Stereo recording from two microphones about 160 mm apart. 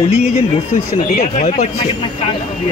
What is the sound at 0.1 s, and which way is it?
Speech, 40° left (ahead or behind).